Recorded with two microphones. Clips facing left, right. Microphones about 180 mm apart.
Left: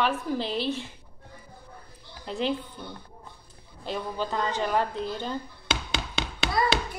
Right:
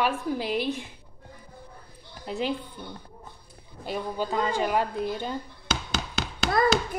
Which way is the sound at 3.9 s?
10° right (ahead or behind).